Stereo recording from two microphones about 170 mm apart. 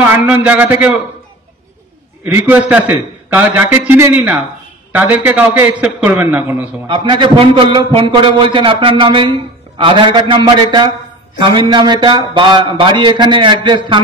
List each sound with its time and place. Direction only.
0.0 s a man's voice: 10° right (ahead or behind)
2.2 s a man's voice: 10° right (ahead or behind)
6.9 s a man's voice: 30° right (ahead or behind)